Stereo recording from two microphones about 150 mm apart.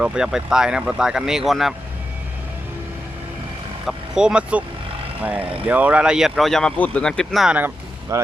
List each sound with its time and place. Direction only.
0.0 s speech: 5° right (ahead or behind)
3.8 s speech: 5° right (ahead or behind)
8.1 s speech: 20° right (ahead or behind)